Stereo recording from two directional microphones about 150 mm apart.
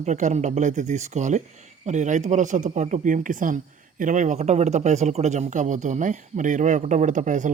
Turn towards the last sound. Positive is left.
turn(degrees=-55)  # may be behind; listen again after turning